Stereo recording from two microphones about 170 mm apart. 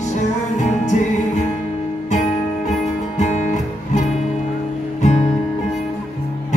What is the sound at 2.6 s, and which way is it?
Music, 45° left (ahead or behind).